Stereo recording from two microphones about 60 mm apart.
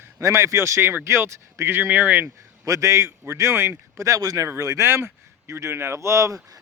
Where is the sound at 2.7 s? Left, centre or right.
Right.